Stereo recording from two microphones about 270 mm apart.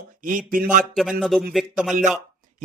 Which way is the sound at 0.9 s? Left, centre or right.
Centre.